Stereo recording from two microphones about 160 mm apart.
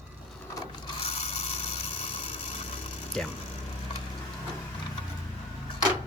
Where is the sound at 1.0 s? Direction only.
40° left (ahead or behind).